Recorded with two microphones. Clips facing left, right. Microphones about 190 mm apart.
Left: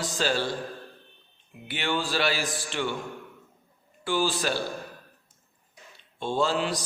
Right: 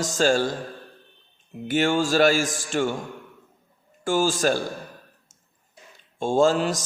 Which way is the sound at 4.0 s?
45° right (ahead or behind).